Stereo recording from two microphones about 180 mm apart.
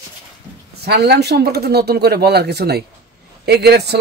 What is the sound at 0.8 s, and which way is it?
Speech, 65° right (ahead or behind).